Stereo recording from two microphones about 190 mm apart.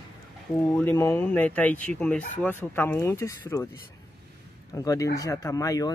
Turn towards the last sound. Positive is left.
turn(degrees=15)  # may be behind; listen again after turning